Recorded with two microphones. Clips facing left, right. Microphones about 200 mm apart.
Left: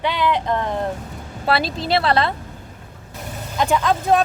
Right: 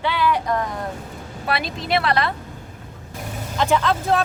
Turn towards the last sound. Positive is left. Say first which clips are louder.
# left 2 dB
turn(degrees=15)  # may be behind; listen again after turning